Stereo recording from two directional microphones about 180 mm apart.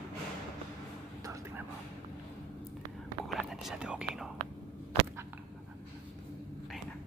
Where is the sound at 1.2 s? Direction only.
15° right (ahead or behind).